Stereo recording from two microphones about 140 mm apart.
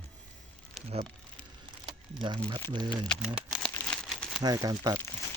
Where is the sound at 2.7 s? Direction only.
35° right (ahead or behind).